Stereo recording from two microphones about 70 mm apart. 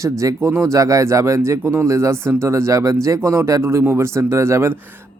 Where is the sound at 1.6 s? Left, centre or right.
Right.